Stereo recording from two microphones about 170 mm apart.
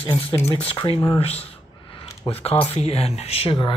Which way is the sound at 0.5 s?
35° left (ahead or behind).